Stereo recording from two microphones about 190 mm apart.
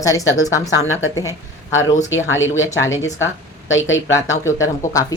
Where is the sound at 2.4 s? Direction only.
90° left.